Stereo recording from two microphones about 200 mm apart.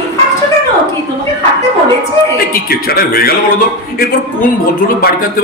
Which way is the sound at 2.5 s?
50° left (ahead or behind).